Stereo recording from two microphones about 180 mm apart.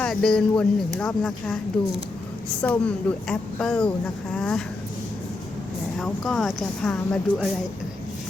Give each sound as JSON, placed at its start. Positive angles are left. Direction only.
{"t": 0.0, "sound": "speech", "side_deg": 5}
{"t": 2.6, "sound": "speech", "side_deg": 5}
{"t": 6.0, "sound": "speech", "side_deg": 0}